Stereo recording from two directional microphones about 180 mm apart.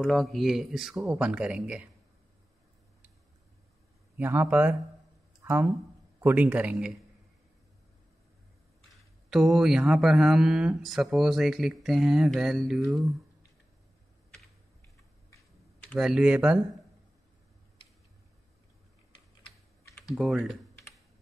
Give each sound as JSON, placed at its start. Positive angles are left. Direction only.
{"t": 0.0, "sound": "speech", "side_deg": 0}
{"t": 0.9, "sound": "a man's voice", "side_deg": -15}
{"t": 4.2, "sound": "a man's voice", "side_deg": -10}
{"t": 6.2, "sound": "a man's voice", "side_deg": -10}
{"t": 9.3, "sound": "speech", "side_deg": 0}
{"t": 15.9, "sound": "speech", "side_deg": 0}
{"t": 20.2, "sound": "speech", "side_deg": 0}